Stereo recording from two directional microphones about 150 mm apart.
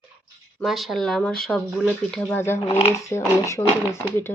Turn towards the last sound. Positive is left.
turn(degrees=15)  # may be behind; listen again after turning